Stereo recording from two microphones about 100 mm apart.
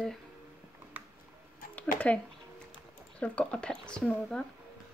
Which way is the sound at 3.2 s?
10° left (ahead or behind).